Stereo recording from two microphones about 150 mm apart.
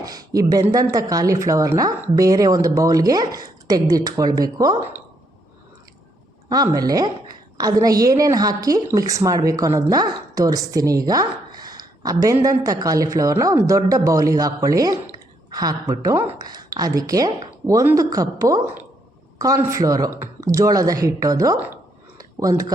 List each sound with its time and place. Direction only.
0.0 s a woman's voice: 25° right (ahead or behind)
4.8 s a woman's voice: 15° right (ahead or behind)
6.7 s a woman's voice: 25° right (ahead or behind)
22.2 s a sound: 25° right (ahead or behind)